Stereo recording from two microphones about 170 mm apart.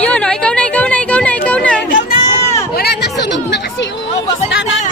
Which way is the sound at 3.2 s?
90° left.